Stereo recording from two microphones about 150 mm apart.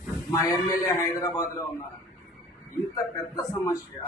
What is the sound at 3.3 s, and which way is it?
Speech, 20° left (ahead or behind).